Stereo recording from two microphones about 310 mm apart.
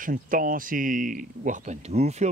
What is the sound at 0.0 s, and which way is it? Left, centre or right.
Speech, right.